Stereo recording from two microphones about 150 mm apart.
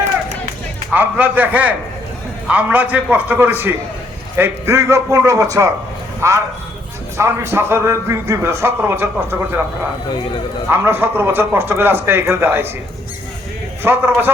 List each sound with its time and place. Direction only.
0.9 s a man's voice: 10° right (ahead or behind)
10.1 s speech: 30° left (ahead or behind)
10.7 s speech: 15° right (ahead or behind)
13.8 s speech: 15° right (ahead or behind)